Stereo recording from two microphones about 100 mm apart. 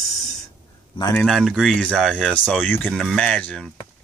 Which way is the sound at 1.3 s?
Centre (ahead or behind).